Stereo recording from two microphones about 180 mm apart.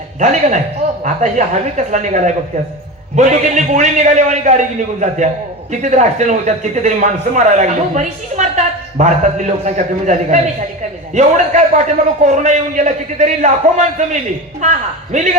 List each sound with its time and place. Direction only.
0.2 s speech: 40° right (ahead or behind)